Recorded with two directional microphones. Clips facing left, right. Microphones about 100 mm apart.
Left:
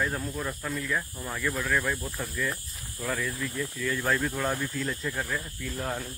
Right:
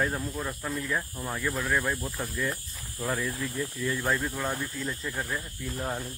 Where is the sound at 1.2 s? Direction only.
15° right (ahead or behind).